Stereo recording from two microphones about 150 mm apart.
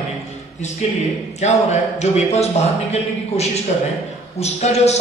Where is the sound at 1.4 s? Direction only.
50° left (ahead or behind).